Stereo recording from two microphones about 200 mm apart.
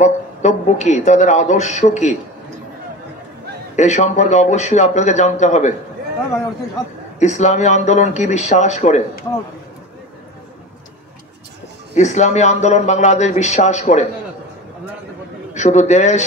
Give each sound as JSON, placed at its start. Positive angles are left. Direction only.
{"t": 0.0, "sound": "a man's voice", "side_deg": 35}
{"t": 3.7, "sound": "a man's voice", "side_deg": 35}
{"t": 7.2, "sound": "a man's voice", "side_deg": 35}
{"t": 11.9, "sound": "a man's voice", "side_deg": 35}
{"t": 15.5, "sound": "a man's voice", "side_deg": 35}